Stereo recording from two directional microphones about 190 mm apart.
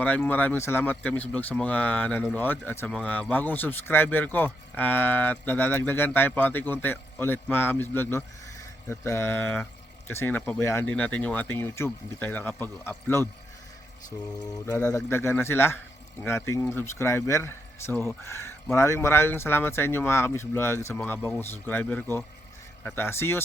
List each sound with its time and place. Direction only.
0.0 s speech: 10° left (ahead or behind)
14.3 s speech: 20° left (ahead or behind)